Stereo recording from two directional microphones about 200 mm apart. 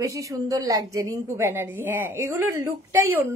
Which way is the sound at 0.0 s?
15° right (ahead or behind).